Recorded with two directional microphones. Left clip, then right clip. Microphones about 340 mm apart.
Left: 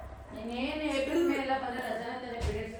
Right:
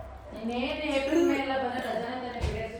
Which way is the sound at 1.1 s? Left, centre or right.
Centre.